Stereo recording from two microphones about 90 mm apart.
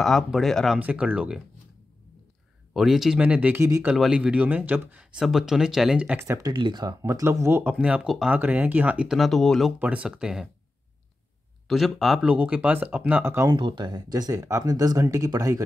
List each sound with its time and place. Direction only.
0.0 s speech: centre (ahead or behind)
0.7 s speech: 15° right (ahead or behind)
2.7 s speech: 5° right (ahead or behind)
3.2 s speech: 15° right (ahead or behind)
5.2 s speech: 5° right (ahead or behind)
6.1 s speech: 25° right (ahead or behind)
6.5 s speech: 60° right (ahead or behind)
7.1 s speech: 35° right (ahead or behind)
7.8 s speech: 10° right (ahead or behind)
8.4 s speech: 20° right (ahead or behind); by 9.8 s centre (ahead or behind)
9.8 s speech: 15° right (ahead or behind)
11.6 s speech: centre (ahead or behind)
12.3 s speech: 15° right (ahead or behind)
13.5 s speech: 60° right (ahead or behind); by 15.6 s 40° right (ahead or behind)